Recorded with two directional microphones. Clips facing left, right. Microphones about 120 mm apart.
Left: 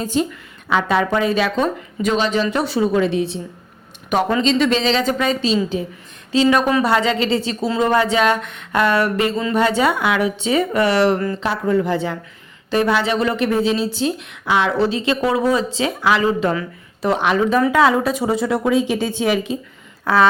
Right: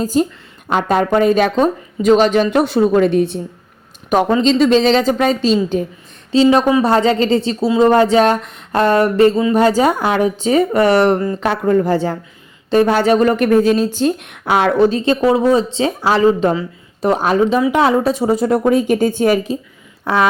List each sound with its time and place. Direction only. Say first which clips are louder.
0.0 s a woman's voice: right 4 dB; 40° right (ahead or behind)
4.4 s speech: right 5 dB; 40° right (ahead or behind)
9.3 s a woman's voice: right 6 dB; 15° right (ahead or behind)
9.6 s a woman's voice: right 4 dB; 35° right (ahead or behind)
15.2 s speech: right 5 dB; 30° right (ahead or behind); by 19.5 s 50° right (ahead or behind)